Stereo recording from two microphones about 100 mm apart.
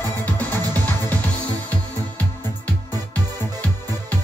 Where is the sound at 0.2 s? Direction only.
15° left (ahead or behind).